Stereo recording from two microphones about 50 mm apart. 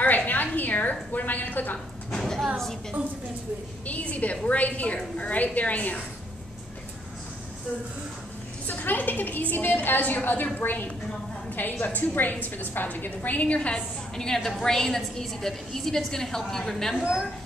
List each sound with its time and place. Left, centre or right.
0.3 s a woman's voice: left
2.0 s speech: centre
3.8 s a woman's voice: left
8.6 s a woman's voice: left
11.8 s a woman's voice: left; by 16.9 s centre
17.0 s a woman's voice: centre